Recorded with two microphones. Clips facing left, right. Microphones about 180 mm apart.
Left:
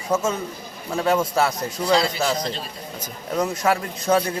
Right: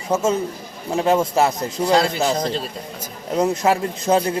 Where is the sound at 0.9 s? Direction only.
20° right (ahead or behind).